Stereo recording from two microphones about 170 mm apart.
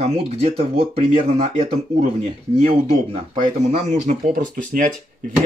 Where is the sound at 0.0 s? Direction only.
35° right (ahead or behind).